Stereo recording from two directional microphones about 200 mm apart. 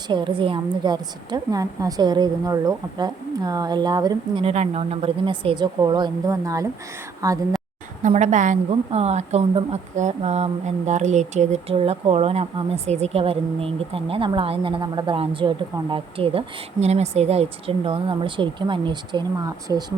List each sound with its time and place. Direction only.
0.1 s a woman's voice: 25° right (ahead or behind)
8.0 s a woman's voice: 35° right (ahead or behind); by 19.8 s 15° right (ahead or behind)